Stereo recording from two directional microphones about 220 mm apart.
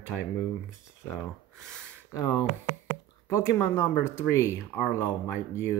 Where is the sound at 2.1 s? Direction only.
15° left (ahead or behind).